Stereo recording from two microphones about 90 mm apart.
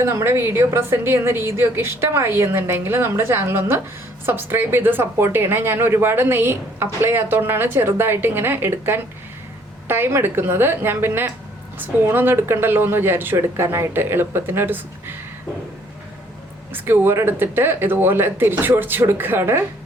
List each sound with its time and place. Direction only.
0.0 s a woman's voice: 30° right (ahead or behind)
16.7 s a woman's voice: 20° right (ahead or behind)